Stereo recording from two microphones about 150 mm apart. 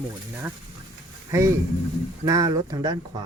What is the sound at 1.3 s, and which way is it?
Speech, 20° right (ahead or behind).